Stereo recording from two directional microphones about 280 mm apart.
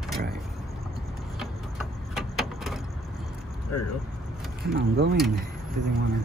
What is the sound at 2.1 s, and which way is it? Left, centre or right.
Vehicle, centre.